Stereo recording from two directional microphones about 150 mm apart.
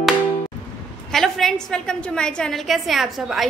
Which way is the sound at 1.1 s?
Centre (ahead or behind).